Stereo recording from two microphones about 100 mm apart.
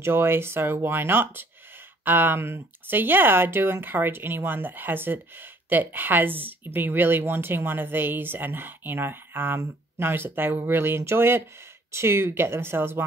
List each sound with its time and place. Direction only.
0.0 s speech: 25° right (ahead or behind)